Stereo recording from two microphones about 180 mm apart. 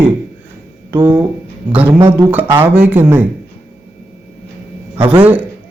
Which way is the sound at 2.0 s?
25° right (ahead or behind).